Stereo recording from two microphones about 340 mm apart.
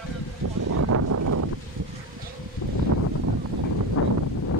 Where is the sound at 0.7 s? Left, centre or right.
Right.